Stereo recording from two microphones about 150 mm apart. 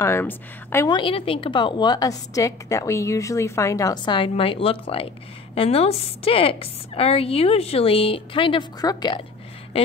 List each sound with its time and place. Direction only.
0.0 s a woman's voice: 15° left (ahead or behind)
0.8 s a woman's voice: 35° left (ahead or behind)